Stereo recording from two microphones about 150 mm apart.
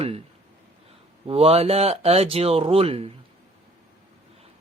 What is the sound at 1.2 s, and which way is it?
Speech, 40° right (ahead or behind).